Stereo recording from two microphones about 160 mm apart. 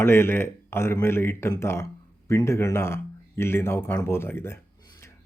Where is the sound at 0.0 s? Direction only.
15° left (ahead or behind).